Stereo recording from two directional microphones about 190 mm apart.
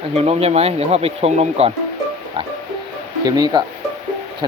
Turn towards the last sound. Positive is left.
turn(degrees=-20)  # may be behind; listen again after turning